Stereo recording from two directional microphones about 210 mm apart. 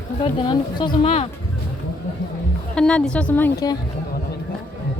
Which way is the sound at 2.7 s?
5° left (ahead or behind).